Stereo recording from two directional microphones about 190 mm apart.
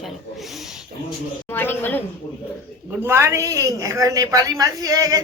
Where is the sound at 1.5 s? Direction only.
10° left (ahead or behind).